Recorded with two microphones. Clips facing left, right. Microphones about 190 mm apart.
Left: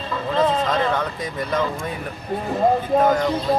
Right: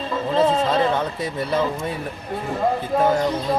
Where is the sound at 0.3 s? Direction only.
30° right (ahead or behind).